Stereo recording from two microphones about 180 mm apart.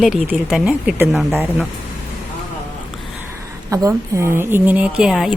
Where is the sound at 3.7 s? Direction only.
15° right (ahead or behind).